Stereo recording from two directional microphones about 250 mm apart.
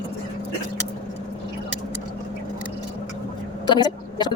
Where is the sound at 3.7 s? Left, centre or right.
Centre.